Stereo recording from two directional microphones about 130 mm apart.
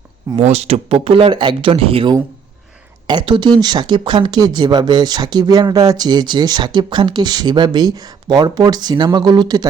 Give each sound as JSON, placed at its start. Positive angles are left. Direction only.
{"t": 0.3, "sound": "speech", "side_deg": -55}